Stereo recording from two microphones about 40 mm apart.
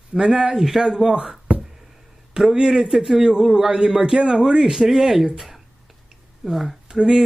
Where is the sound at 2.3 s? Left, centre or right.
Centre.